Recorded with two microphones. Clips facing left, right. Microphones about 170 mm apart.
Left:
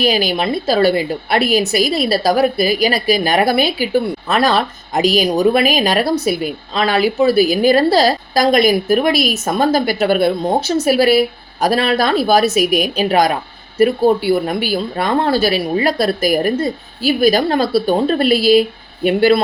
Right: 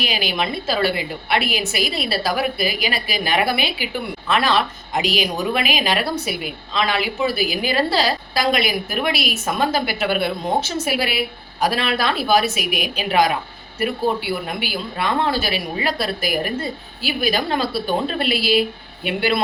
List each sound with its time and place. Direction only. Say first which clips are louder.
0.0 s a woman's voice: left 7 dB; 40° left (ahead or behind)